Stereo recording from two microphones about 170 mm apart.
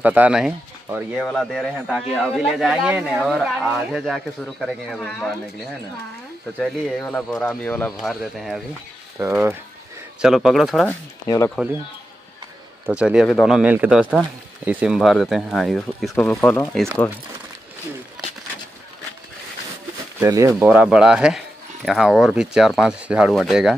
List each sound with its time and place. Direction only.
0.0 s speech: 10° right (ahead or behind)
1.2 s speech: centre (ahead or behind)
6.6 s speech: 5° left (ahead or behind)
9.2 s speech: 15° right (ahead or behind)
10.2 s speech: centre (ahead or behind)
11.2 s speech: 20° left (ahead or behind)
12.8 s speech: 5° right (ahead or behind)
20.2 s speech: 20° right (ahead or behind)
20.6 s speech: 5° right (ahead or behind)